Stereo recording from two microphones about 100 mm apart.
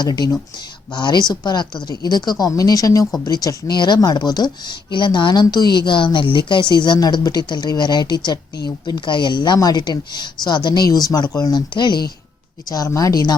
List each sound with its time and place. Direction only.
0.0 s speech: 45° left (ahead or behind)
12.7 s speech: 35° left (ahead or behind)